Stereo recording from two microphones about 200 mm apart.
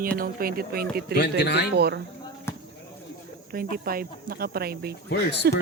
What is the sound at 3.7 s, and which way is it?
Speech, 45° right (ahead or behind).